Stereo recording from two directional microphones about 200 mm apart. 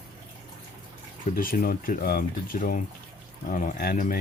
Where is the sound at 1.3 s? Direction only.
45° left (ahead or behind).